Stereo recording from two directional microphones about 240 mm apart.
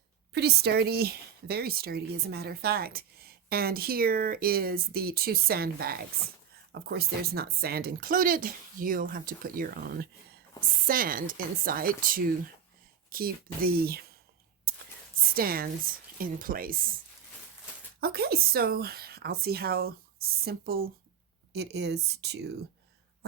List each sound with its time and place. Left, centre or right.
0.3 s speech: right
15.4 s speech: right
18.0 s speech: right